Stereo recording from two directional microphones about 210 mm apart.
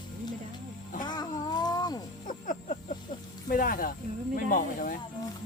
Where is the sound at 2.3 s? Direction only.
40° left (ahead or behind).